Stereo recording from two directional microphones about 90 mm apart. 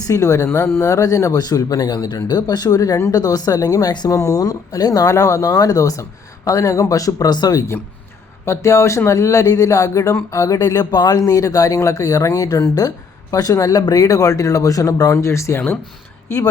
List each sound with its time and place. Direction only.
0.1 s speech: 35° left (ahead or behind)
8.4 s speech: 35° left (ahead or behind)